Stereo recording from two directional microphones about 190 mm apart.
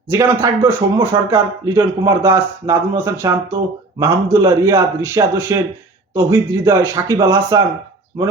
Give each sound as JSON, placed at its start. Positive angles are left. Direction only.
{"t": 0.1, "sound": "speech", "side_deg": -15}